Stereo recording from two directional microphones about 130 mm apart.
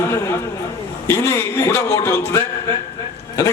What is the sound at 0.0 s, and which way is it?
A man's voice, 20° left (ahead or behind).